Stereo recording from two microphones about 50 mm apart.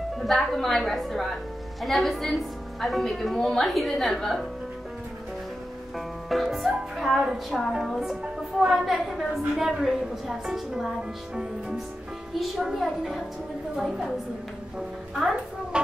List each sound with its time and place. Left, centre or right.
0.2 s a woman's voice: centre
5.9 s music: centre
7.9 s a woman's voice: centre
15.7 s a sound: centre